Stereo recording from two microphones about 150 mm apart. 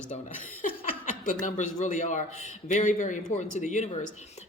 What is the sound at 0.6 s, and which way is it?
A man's voice, 65° left (ahead or behind).